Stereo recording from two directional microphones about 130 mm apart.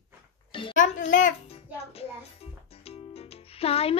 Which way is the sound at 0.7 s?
80° left.